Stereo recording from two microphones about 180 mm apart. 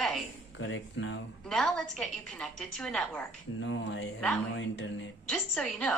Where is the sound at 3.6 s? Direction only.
90° left.